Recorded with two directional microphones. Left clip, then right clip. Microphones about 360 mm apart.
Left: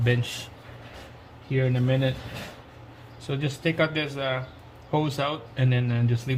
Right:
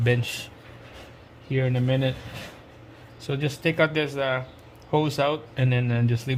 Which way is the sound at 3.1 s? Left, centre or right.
Right.